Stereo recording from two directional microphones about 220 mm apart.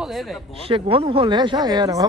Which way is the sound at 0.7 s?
25° right (ahead or behind).